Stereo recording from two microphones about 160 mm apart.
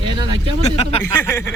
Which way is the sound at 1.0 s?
15° left (ahead or behind).